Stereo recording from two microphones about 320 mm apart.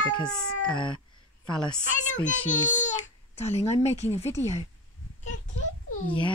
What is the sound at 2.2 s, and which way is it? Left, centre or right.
A child's voice, left.